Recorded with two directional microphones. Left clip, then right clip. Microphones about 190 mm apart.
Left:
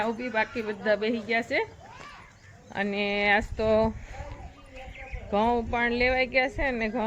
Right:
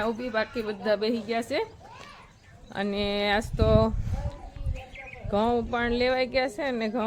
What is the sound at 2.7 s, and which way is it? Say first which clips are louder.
A woman's voice: left 1 dB; 15° right (ahead or behind).